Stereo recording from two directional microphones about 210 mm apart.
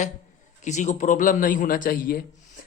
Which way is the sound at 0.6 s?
35° left (ahead or behind).